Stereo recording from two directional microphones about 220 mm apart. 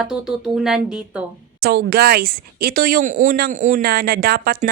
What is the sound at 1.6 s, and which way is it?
A woman's voice, 45° right (ahead or behind).